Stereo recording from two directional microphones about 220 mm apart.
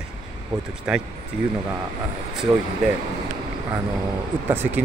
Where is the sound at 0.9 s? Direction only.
5° right (ahead or behind).